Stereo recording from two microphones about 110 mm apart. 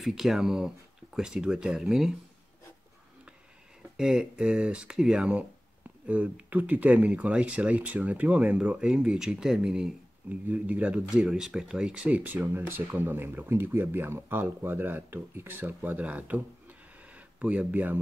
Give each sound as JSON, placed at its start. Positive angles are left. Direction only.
{"t": 0.0, "sound": "speech", "side_deg": 0}
{"t": 3.9, "sound": "speech", "side_deg": -5}